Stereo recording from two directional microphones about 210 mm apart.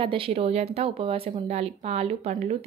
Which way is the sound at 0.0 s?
25° right (ahead or behind).